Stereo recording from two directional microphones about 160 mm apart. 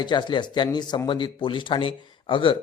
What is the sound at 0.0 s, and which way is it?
Speech, 30° left (ahead or behind).